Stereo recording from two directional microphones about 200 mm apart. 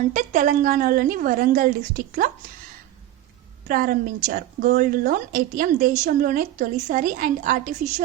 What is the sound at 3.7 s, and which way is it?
A woman's voice, 45° right (ahead or behind).